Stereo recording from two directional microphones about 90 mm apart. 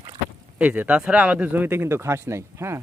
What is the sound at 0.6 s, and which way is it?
Speech, 15° right (ahead or behind).